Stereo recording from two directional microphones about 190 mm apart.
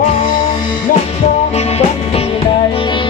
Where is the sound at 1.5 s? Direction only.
35° left (ahead or behind).